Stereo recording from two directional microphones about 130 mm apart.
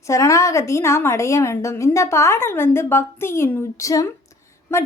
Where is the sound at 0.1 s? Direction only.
25° left (ahead or behind).